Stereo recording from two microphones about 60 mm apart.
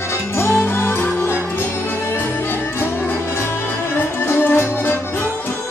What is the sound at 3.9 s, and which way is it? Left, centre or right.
Music, left.